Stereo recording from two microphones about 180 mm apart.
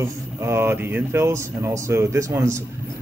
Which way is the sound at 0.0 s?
15° right (ahead or behind).